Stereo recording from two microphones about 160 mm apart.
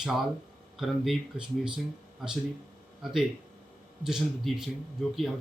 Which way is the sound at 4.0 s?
5° right (ahead or behind).